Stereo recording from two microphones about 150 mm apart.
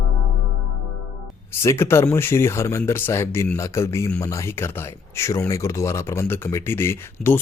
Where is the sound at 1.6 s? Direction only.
15° left (ahead or behind).